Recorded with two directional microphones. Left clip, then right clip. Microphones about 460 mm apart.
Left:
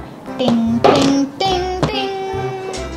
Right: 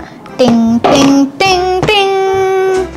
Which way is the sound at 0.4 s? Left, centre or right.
Right.